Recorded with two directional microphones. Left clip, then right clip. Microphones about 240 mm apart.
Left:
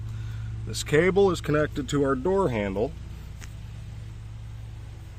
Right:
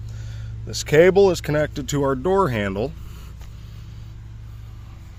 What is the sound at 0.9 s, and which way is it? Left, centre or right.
Speech, right.